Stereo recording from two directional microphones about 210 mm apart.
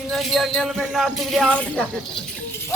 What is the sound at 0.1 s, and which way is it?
Speech, centre (ahead or behind).